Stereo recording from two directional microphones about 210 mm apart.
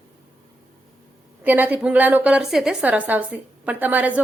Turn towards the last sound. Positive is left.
turn(degrees=-10)  # may be behind; listen again after turning